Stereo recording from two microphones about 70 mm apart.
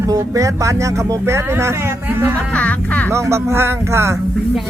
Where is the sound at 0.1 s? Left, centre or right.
Right.